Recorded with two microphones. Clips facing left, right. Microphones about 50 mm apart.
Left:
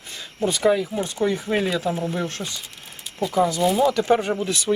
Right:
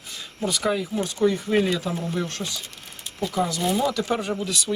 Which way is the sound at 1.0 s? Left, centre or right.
Left.